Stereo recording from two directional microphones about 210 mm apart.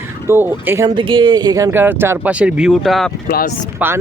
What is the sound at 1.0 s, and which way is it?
Speech, 25° right (ahead or behind).